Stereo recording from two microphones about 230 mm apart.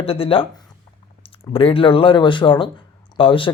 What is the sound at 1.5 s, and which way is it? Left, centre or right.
A man's voice, left.